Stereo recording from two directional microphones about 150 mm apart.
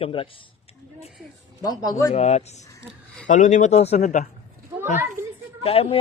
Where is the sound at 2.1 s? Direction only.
45° left (ahead or behind).